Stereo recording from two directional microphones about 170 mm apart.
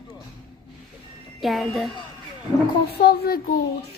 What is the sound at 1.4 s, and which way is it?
Speech, centre (ahead or behind).